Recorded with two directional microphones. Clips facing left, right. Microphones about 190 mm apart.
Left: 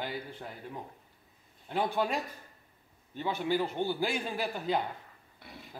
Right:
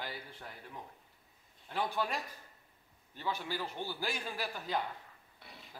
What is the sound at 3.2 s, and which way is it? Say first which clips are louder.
A man's voice: left 8 dB; 20° left (ahead or behind).